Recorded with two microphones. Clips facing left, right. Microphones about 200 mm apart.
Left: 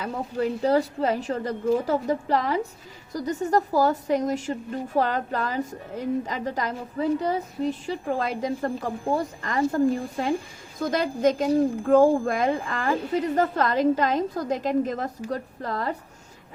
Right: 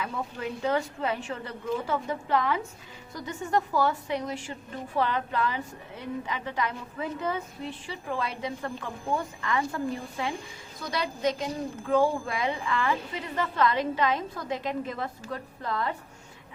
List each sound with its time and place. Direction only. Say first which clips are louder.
0.0 s a woman's voice: left 6 dB; 40° left (ahead or behind)